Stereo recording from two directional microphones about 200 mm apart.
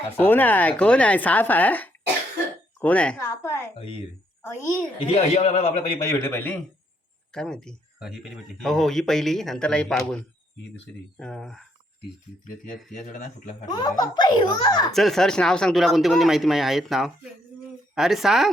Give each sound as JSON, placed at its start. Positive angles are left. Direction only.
{"t": 0.2, "sound": "speech", "side_deg": 10}
{"t": 3.8, "sound": "a child's voice", "side_deg": 25}
{"t": 6.0, "sound": "speech", "side_deg": 15}
{"t": 11.2, "sound": "speech", "side_deg": 5}
{"t": 12.5, "sound": "speech", "side_deg": 45}
{"t": 13.7, "sound": "a child's voice", "side_deg": 20}
{"t": 14.9, "sound": "speech", "side_deg": 0}